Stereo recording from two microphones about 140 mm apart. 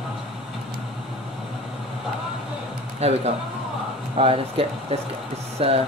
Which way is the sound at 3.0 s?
50° right (ahead or behind).